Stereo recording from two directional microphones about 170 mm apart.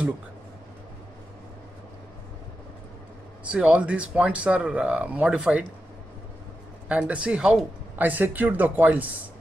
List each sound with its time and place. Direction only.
3.4 s speech: 5° right (ahead or behind)
6.9 s speech: 5° right (ahead or behind)